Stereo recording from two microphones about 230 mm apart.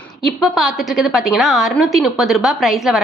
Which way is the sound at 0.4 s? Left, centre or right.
Centre.